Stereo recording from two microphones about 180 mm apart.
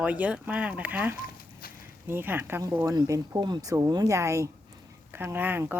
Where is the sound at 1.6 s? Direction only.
55° left (ahead or behind).